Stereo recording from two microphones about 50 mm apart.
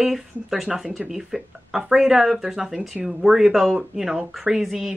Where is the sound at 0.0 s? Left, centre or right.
Centre.